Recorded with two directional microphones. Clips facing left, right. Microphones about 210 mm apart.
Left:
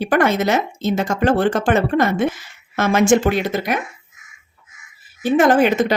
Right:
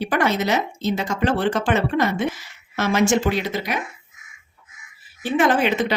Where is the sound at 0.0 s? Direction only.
50° left (ahead or behind).